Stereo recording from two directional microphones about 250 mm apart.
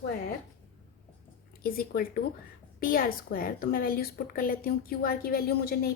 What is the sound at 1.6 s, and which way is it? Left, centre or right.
A woman's voice, left.